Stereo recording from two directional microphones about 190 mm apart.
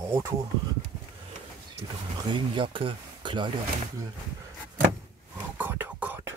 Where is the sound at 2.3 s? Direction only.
25° right (ahead or behind).